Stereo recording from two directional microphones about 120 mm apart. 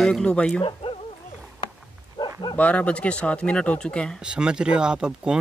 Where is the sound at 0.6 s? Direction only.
45° left (ahead or behind).